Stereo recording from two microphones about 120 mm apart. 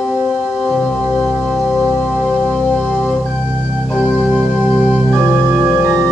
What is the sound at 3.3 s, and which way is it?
Organ, 10° right (ahead or behind).